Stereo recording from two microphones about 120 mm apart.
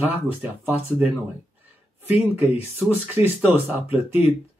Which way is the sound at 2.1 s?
15° right (ahead or behind).